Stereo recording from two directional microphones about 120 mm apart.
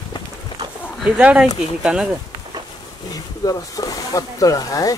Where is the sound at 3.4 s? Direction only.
30° left (ahead or behind).